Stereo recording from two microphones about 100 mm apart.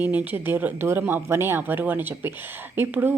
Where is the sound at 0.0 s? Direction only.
15° right (ahead or behind).